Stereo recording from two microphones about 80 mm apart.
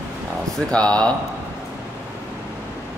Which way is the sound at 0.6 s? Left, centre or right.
Centre.